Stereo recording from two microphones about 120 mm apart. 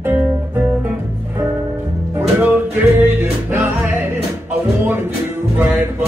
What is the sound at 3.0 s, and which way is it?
Music, 20° right (ahead or behind).